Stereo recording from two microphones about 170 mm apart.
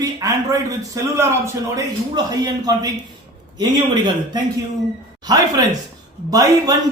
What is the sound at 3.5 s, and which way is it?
A man's voice, 25° right (ahead or behind).